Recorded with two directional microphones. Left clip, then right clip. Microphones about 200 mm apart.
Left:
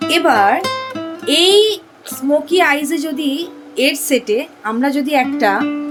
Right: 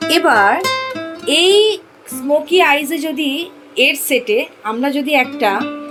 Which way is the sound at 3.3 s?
45° left (ahead or behind).